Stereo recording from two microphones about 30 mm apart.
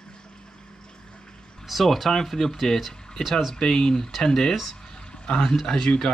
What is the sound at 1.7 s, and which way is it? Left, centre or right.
Speech, centre.